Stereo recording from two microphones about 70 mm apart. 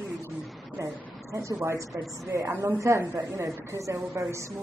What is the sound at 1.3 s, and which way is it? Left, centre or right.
A woman's voice, right.